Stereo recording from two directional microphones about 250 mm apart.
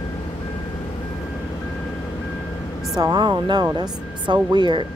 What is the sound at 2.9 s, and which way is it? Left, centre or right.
Speech, centre.